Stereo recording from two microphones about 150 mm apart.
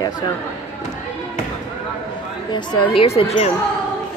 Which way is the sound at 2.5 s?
35° left (ahead or behind).